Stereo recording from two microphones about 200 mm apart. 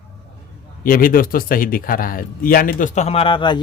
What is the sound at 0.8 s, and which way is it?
Speech, 45° left (ahead or behind).